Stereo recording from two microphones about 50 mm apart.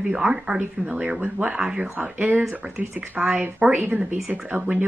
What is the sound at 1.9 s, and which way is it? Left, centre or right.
Speech, right.